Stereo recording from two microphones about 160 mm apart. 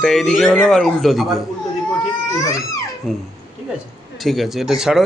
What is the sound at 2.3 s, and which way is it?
Baby cry, 20° left (ahead or behind).